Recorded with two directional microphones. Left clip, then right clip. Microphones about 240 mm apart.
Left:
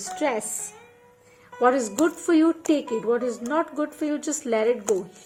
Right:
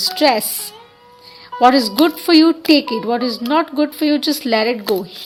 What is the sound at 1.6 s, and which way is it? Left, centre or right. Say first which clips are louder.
A woman's voice: right 9 dB; right.